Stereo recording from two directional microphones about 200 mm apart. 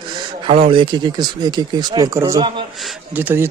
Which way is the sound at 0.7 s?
25° right (ahead or behind).